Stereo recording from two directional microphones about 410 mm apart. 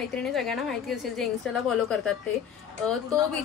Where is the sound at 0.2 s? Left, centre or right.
Centre.